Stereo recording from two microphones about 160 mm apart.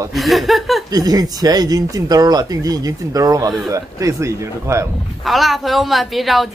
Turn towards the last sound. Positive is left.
turn(degrees=0)  # may be behind; listen again after turning